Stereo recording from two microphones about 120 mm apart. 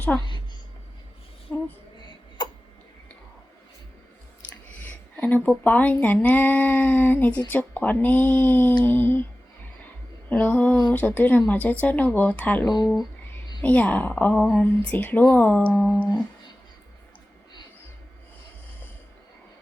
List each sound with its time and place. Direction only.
0.1 s speech: 15° left (ahead or behind)
1.5 s a sound: 10° left (ahead or behind)
4.9 s a sound: 10° left (ahead or behind)
5.6 s speech: 15° left (ahead or behind)
10.2 s speech: 10° left (ahead or behind)
12.6 s speech: 35° left (ahead or behind)
13.6 s speech: 10° left (ahead or behind)